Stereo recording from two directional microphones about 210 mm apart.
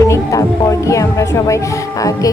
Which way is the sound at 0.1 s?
15° left (ahead or behind).